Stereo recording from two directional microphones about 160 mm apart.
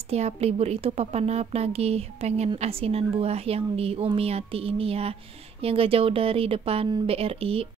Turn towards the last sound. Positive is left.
turn(degrees=-35)  # may be behind; listen again after turning